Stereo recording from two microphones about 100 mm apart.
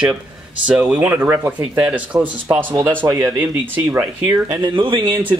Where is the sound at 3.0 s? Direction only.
35° right (ahead or behind).